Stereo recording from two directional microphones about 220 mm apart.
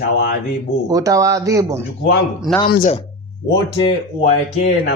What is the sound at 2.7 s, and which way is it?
Speech, 35° left (ahead or behind).